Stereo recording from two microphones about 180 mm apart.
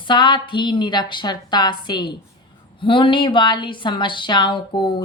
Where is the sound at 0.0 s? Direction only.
25° left (ahead or behind).